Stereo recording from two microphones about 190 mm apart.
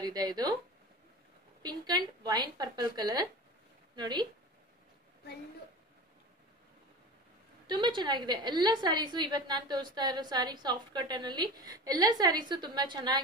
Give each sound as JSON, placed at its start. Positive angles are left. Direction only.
{"t": 0.0, "sound": "speech", "side_deg": -20}
{"t": 1.6, "sound": "a woman's voice", "side_deg": -20}
{"t": 7.6, "sound": "a woman's voice", "side_deg": -25}